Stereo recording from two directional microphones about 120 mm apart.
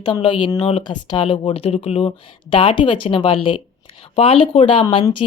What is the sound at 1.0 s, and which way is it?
Speech, 45° left (ahead or behind).